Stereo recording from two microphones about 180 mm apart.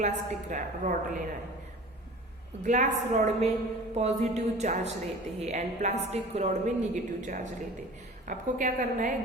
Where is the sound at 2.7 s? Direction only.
40° right (ahead or behind).